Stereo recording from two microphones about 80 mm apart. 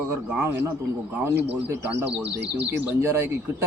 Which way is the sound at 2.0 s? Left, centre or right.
Centre.